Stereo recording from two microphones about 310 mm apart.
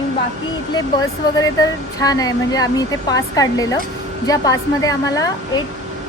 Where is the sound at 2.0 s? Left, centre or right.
Centre.